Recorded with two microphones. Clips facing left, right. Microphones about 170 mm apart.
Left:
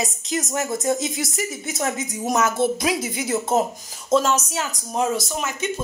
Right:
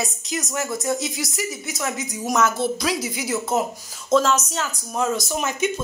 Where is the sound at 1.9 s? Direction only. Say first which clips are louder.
Right 3 dB; 20° left (ahead or behind).